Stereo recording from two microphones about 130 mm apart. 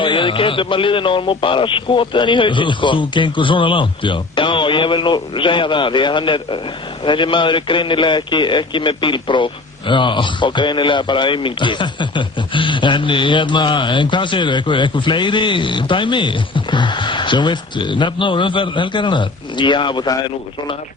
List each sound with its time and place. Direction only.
0.0 s a man's voice: 40° left (ahead or behind)